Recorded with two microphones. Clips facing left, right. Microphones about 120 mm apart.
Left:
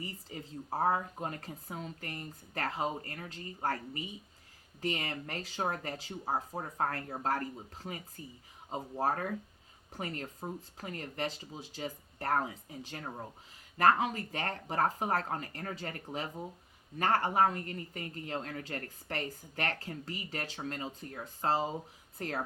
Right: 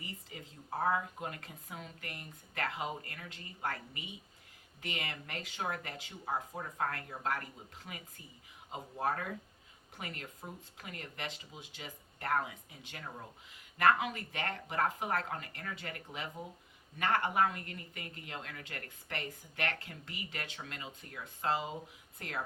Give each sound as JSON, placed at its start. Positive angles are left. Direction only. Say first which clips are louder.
{"t": 0.0, "sound": "speech", "louder": "left 5 dB", "side_deg": 35}